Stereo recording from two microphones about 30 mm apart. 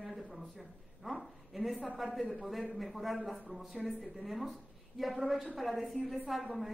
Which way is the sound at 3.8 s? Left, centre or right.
Centre.